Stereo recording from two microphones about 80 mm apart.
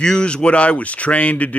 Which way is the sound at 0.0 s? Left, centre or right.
Centre.